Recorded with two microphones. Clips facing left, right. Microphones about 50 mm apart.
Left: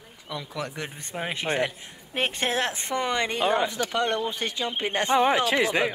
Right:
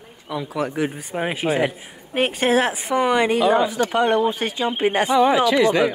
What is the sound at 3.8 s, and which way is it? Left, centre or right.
Speech, centre.